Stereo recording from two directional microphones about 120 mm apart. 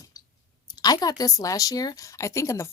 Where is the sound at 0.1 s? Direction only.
30° left (ahead or behind).